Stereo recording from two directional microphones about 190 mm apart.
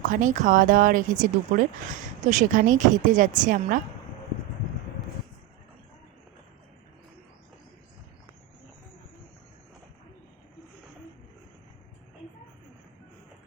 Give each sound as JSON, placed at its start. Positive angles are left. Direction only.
{"t": 0.0, "sound": "speech", "side_deg": -40}